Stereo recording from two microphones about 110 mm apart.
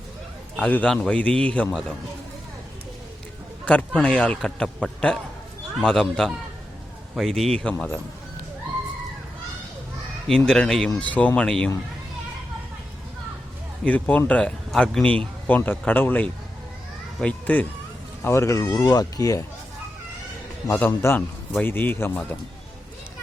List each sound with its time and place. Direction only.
0.6 s a man's voice: 10° left (ahead or behind)
3.7 s a man's voice: 10° left (ahead or behind)
10.2 s a man's voice: 5° left (ahead or behind)
13.8 s a man's voice: 15° left (ahead or behind); by 19.5 s 30° left (ahead or behind)
20.7 s a man's voice: 20° left (ahead or behind)